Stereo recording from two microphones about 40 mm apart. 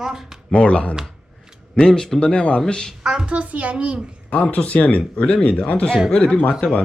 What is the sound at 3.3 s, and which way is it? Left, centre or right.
Speech, right.